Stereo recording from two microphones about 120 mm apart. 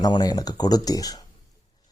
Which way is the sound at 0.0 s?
30° left (ahead or behind).